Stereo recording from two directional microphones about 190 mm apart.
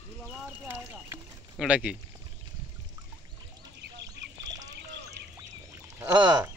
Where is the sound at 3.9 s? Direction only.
65° right (ahead or behind).